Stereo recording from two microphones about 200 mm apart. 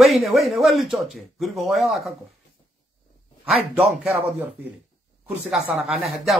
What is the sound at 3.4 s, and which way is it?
Speech, centre (ahead or behind).